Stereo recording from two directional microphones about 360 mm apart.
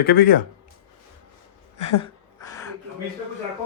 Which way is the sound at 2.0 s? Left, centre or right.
Centre.